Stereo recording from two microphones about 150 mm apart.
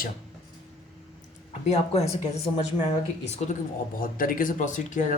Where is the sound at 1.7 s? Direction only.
45° left (ahead or behind).